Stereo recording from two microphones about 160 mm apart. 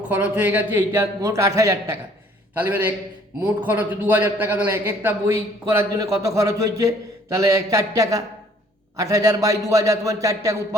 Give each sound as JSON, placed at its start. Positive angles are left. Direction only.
{"t": 0.1, "sound": "a man's voice", "side_deg": -10}